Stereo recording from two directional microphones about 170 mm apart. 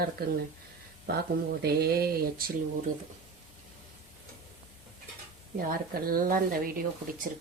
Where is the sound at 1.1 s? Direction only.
65° right (ahead or behind).